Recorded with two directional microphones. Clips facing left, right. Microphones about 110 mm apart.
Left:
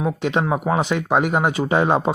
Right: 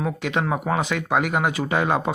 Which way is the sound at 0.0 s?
25° left (ahead or behind).